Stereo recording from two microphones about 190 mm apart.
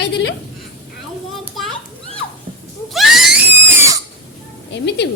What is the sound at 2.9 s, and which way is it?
Screaming, centre (ahead or behind).